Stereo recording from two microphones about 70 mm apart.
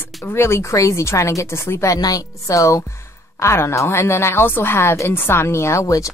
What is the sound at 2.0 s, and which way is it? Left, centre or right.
A woman's voice, left.